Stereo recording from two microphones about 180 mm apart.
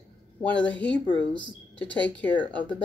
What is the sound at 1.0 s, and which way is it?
Speech, 25° right (ahead or behind).